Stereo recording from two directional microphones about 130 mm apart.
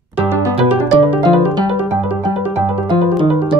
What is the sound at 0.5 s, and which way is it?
Music, 5° right (ahead or behind).